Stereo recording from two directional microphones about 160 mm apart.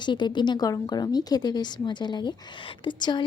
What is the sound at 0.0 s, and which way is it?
A woman's voice, 30° left (ahead or behind).